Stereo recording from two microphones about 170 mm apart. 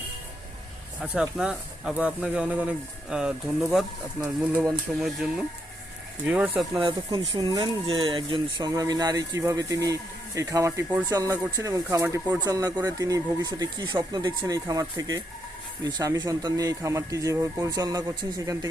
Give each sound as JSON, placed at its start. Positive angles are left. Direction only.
{"t": 1.0, "sound": "speech", "side_deg": -5}
{"t": 6.8, "sound": "speech", "side_deg": -25}